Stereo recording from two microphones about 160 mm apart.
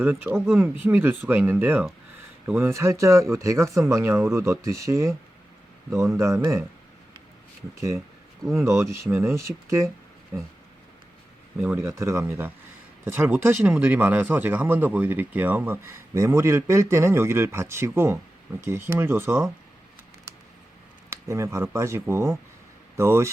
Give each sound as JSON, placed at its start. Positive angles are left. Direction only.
{"t": 0.0, "sound": "speech", "side_deg": -15}
{"t": 6.1, "sound": "speech", "side_deg": -20}
{"t": 8.5, "sound": "speech", "side_deg": -15}
{"t": 11.5, "sound": "speech", "side_deg": -10}
{"t": 21.1, "sound": "speech", "side_deg": -15}